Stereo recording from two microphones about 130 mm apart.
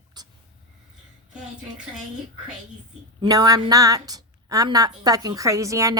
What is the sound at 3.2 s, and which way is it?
A woman's voice, 30° right (ahead or behind).